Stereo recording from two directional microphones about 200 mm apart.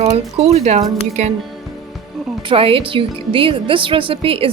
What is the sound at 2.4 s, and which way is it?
A woman's voice, 30° right (ahead or behind).